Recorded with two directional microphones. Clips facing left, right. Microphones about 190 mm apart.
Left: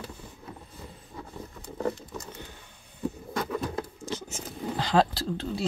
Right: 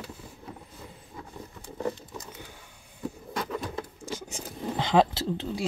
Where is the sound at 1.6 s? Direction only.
10° right (ahead or behind).